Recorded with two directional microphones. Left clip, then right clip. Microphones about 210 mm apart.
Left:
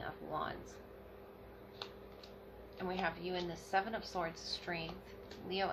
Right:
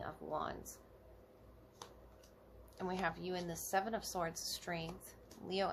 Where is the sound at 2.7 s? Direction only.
50° right (ahead or behind).